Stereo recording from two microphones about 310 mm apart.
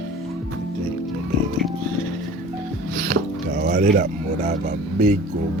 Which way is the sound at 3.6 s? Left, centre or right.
Right.